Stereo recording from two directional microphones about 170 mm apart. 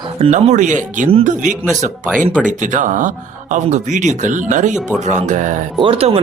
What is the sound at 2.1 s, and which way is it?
Speech, 5° right (ahead or behind).